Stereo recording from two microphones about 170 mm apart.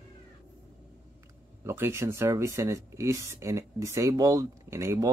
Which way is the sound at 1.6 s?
15° right (ahead or behind).